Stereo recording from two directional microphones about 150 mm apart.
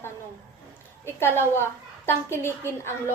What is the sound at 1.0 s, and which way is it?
A woman's voice, 15° left (ahead or behind).